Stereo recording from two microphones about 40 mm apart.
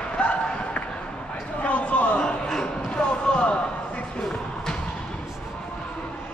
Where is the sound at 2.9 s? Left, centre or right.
Left.